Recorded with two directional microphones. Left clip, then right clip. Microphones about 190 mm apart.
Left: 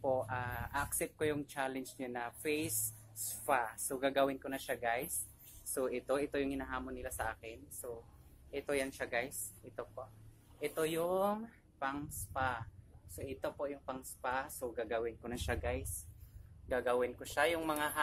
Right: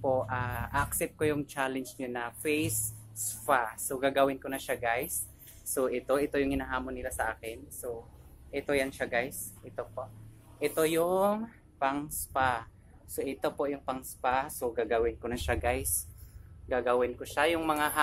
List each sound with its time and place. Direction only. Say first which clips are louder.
0.0 s speech: right 6 dB; 5° left (ahead or behind); by 15.9 s 15° right (ahead or behind)
16.6 s speech: right 6 dB; centre (ahead or behind)